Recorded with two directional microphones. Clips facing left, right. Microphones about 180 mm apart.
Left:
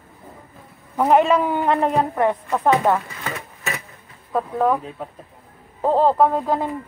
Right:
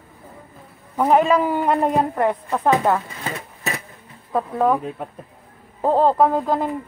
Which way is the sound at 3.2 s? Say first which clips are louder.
Right 1 dB; 35° right (ahead or behind).